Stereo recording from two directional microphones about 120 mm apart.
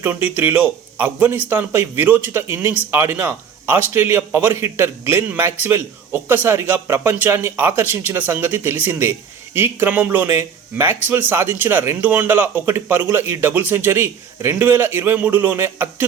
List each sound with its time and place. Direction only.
0.0 s speech: 15° right (ahead or behind)